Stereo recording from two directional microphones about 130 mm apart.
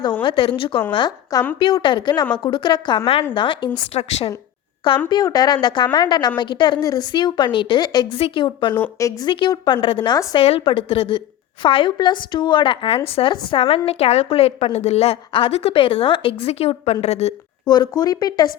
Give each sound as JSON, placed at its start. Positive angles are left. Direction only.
{"t": 0.2, "sound": "a woman's voice", "side_deg": 40}
{"t": 0.9, "sound": "a woman's voice", "side_deg": 30}
{"t": 3.9, "sound": "a woman's voice", "side_deg": 50}
{"t": 5.0, "sound": "a woman's voice", "side_deg": 30}
{"t": 8.7, "sound": "a woman's voice", "side_deg": 20}
{"t": 9.3, "sound": "a woman's voice", "side_deg": 35}
{"t": 17.7, "sound": "a woman's voice", "side_deg": 30}